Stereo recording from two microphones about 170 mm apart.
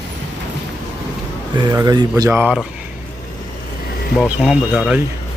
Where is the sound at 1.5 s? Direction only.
25° right (ahead or behind).